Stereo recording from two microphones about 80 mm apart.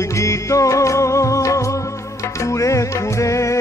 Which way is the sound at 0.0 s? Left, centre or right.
Left.